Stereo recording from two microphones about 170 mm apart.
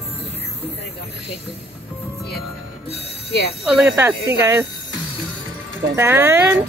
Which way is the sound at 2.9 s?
35° left (ahead or behind).